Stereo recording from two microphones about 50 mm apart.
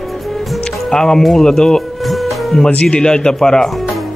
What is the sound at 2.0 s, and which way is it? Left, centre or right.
Music, centre.